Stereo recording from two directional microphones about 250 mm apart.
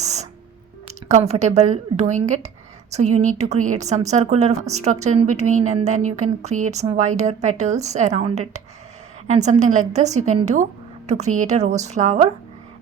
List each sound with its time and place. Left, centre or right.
0.0 s music: right
1.0 s a woman's voice: right